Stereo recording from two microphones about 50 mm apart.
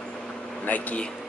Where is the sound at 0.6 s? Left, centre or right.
Left.